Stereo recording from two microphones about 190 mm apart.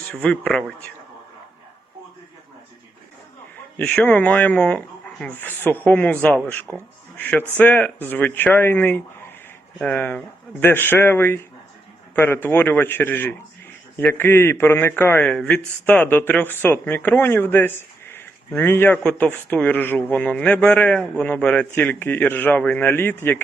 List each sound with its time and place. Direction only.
0.1 s speech: 5° left (ahead or behind)
3.8 s a man's voice: 5° left (ahead or behind)